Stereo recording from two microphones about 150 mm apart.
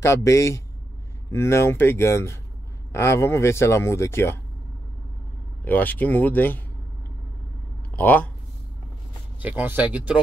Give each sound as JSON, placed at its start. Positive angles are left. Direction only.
{"t": 0.0, "sound": "a man's voice", "side_deg": 20}
{"t": 5.7, "sound": "speech", "side_deg": 10}
{"t": 7.9, "sound": "speech", "side_deg": 10}
{"t": 9.4, "sound": "speech", "side_deg": -10}